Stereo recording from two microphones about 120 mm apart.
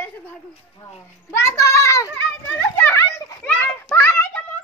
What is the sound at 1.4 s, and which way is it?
Speech, 25° left (ahead or behind).